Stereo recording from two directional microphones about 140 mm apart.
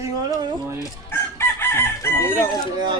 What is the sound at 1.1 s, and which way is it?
Chicken, 15° left (ahead or behind).